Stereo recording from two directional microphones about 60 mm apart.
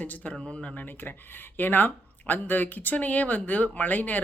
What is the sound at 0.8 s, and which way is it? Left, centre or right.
Speech, left.